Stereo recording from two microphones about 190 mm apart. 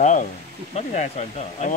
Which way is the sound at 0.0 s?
40° left (ahead or behind).